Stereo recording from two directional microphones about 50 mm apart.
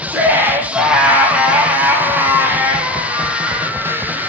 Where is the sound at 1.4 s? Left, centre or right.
Right.